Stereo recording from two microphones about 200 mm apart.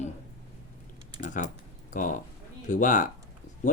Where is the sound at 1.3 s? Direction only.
40° left (ahead or behind).